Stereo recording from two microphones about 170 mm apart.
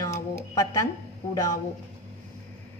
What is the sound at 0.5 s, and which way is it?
A woman's voice, 20° left (ahead or behind).